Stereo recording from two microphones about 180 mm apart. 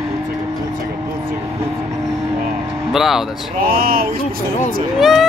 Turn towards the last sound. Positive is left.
turn(degrees=0)  # may be behind; listen again after turning